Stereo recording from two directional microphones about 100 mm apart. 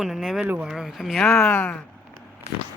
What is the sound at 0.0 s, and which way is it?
Speech, centre (ahead or behind).